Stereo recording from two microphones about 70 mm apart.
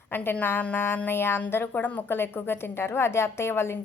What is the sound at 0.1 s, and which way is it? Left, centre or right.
A woman's voice, left.